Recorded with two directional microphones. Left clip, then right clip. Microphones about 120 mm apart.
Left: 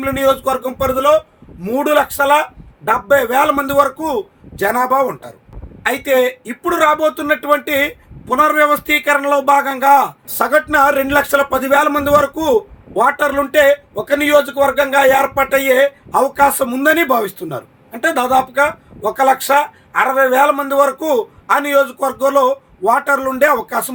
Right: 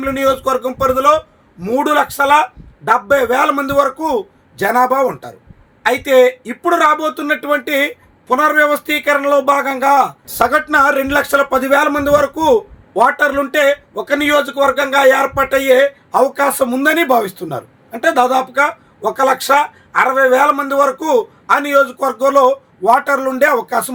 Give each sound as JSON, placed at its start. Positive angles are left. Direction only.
{"t": 0.0, "sound": "a man's voice", "side_deg": -30}
{"t": 5.8, "sound": "a man's voice", "side_deg": -40}